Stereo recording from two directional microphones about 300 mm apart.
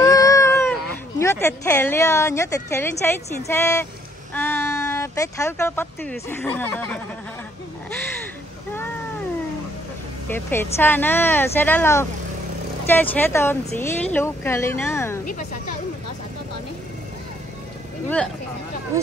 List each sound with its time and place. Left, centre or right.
0.0 s cat: centre
1.2 s a woman's voice: centre
10.3 s a woman's voice: centre
15.2 s speech: left
18.0 s speech: centre